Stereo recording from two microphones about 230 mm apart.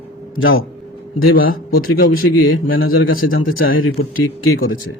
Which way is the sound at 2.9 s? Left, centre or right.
Left.